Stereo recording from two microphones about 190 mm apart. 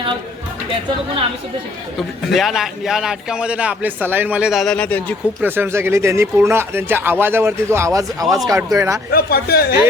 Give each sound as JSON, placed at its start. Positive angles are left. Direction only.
{"t": 2.0, "sound": "speech", "side_deg": 0}
{"t": 5.4, "sound": "speech", "side_deg": -10}
{"t": 9.1, "sound": "speech", "side_deg": 55}